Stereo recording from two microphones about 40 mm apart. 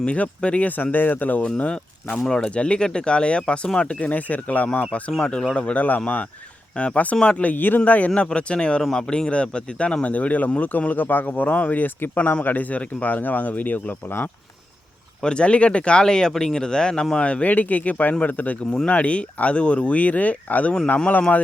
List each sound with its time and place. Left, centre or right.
0.0 s speech: left
0.8 s a man's voice: left
1.5 s speech: left
4.1 s speech: left
5.2 s speech: centre
5.5 s speech: left
7.5 s a man's voice: left
7.9 s a man's voice: left
15.2 s speech: left
17.2 s speech: left
17.5 s a man's voice: left